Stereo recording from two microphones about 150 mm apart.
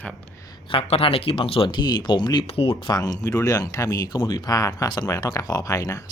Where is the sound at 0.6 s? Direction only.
40° left (ahead or behind).